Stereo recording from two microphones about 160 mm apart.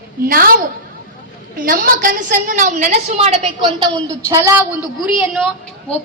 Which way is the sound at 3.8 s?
20° right (ahead or behind).